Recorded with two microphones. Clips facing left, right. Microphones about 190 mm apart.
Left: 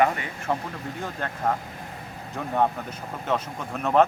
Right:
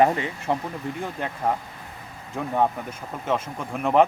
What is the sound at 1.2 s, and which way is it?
Speech, 15° right (ahead or behind).